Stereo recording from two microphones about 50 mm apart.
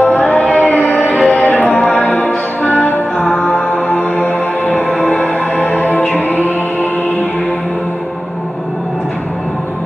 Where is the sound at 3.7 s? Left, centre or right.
Left.